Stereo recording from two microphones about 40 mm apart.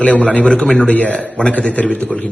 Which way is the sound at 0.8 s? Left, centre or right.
Left.